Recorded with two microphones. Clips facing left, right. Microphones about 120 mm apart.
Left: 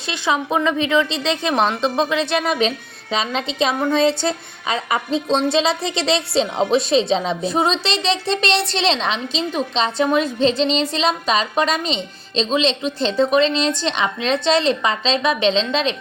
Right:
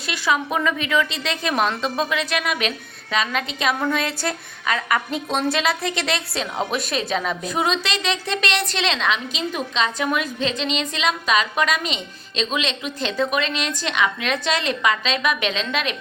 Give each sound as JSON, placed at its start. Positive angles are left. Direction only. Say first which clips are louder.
{"t": 0.1, "sound": "a woman's voice", "louder": "left 2 dB", "side_deg": 25}